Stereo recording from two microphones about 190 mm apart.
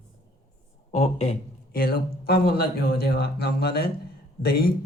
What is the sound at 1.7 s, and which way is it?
Speech, 55° left (ahead or behind).